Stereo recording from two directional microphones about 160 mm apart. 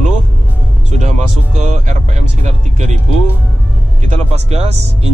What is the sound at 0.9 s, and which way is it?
Music, 50° right (ahead or behind).